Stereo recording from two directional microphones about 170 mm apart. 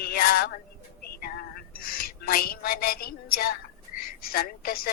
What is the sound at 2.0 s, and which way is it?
A woman's voice, 60° left (ahead or behind).